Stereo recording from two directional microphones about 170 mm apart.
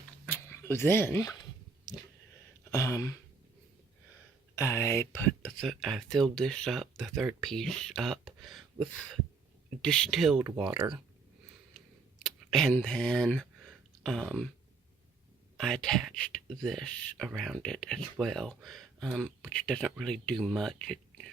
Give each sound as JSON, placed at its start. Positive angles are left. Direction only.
{"t": 0.3, "sound": "dog", "side_deg": 15}
{"t": 2.6, "sound": "a sound", "side_deg": 20}
{"t": 4.5, "sound": "speech", "side_deg": 15}
{"t": 12.2, "sound": "speech", "side_deg": 0}
{"t": 15.5, "sound": "speech", "side_deg": 0}